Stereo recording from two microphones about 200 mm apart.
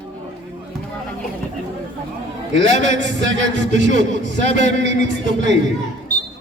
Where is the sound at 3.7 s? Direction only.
65° right (ahead or behind).